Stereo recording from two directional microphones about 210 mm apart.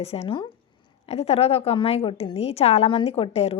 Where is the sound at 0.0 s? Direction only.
30° left (ahead or behind).